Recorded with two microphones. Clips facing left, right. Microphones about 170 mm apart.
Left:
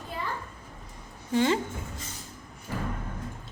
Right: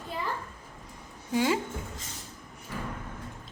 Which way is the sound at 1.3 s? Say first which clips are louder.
Left 2 dB; 5° right (ahead or behind).